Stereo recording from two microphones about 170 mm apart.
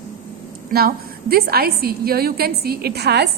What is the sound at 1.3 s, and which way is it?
A woman's voice, 65° right (ahead or behind).